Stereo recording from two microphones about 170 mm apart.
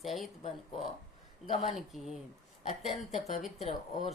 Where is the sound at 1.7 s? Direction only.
Centre (ahead or behind).